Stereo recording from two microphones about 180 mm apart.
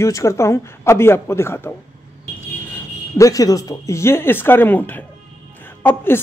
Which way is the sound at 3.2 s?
20° left (ahead or behind).